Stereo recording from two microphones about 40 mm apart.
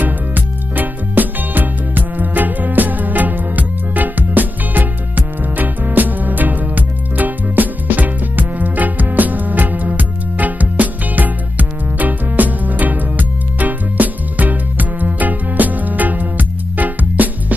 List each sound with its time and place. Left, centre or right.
0.0 s music: right